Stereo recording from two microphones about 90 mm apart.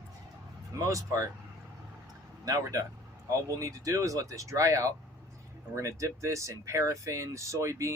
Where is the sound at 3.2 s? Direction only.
35° right (ahead or behind).